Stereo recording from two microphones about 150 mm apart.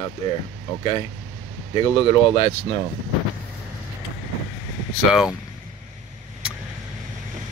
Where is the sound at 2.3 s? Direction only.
40° left (ahead or behind).